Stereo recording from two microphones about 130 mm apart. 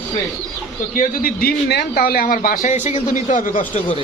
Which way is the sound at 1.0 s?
90° left.